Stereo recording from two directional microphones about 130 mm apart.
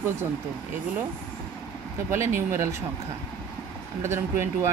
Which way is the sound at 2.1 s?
20° right (ahead or behind).